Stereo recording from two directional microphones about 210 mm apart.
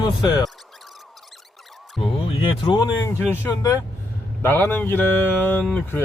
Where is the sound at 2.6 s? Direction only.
20° left (ahead or behind).